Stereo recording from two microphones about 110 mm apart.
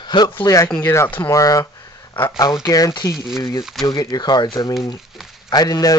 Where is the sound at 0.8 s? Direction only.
25° left (ahead or behind); by 4.7 s 40° left (ahead or behind).